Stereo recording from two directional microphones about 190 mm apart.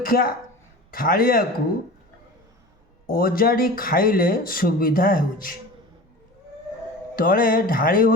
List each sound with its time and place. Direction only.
0.0 s a man's voice: 50° left (ahead or behind)
3.1 s speech: 50° left (ahead or behind)
7.2 s speech: 50° left (ahead or behind)